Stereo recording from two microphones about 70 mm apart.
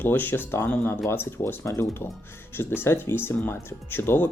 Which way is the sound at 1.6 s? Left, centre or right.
Left.